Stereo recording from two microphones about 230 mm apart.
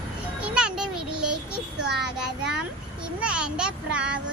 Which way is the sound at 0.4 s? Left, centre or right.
Centre.